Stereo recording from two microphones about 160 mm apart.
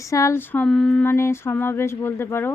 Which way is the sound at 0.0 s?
20° left (ahead or behind).